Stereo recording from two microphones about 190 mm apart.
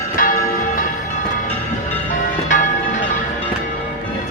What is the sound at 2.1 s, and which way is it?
Music, 40° left (ahead or behind).